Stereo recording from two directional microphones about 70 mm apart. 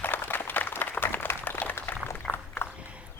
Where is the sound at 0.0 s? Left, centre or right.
Left.